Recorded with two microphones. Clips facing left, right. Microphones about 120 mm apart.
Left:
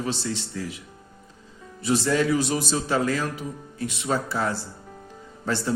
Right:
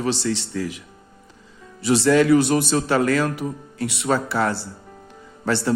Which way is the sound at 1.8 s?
75° right (ahead or behind).